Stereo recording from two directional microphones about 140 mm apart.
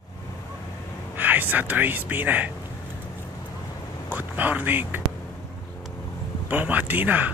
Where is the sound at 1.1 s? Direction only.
15° right (ahead or behind).